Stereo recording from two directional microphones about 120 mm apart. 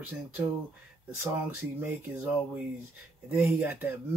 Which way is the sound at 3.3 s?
20° right (ahead or behind).